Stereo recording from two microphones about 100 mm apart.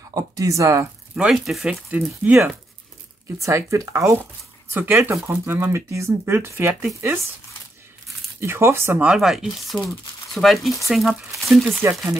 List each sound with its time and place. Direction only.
0.1 s speech: 35° right (ahead or behind)
1.1 s speech: 5° right (ahead or behind)
1.9 s speech: 15° right (ahead or behind)
3.3 s speech: 30° right (ahead or behind)
8.4 s speech: 25° right (ahead or behind)
9.0 s speech: 5° right (ahead or behind)